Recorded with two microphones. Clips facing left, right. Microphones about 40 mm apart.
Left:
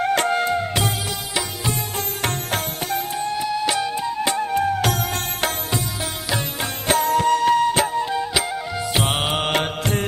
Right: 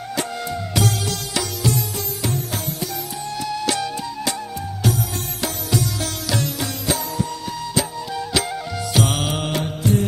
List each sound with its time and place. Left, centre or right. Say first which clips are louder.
0.0 s music: left 7 dB; left
1.3 s music: right 2 dB; centre
2.2 s music: left 1 dB; left
3.2 s music: even; left
4.5 s music: left 5 dB; left
6.6 s music: left 4 dB; left
8.1 s music: left 1 dB; centre
8.9 s mantra: right 1 dB; left